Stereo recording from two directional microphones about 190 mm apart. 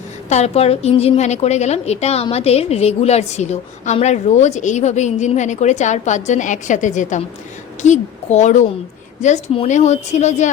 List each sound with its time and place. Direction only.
0.3 s a woman's voice: 35° left (ahead or behind)